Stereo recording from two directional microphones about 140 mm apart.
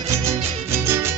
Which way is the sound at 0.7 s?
20° right (ahead or behind).